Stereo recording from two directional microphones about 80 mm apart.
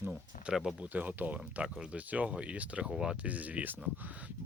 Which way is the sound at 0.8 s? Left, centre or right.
Centre.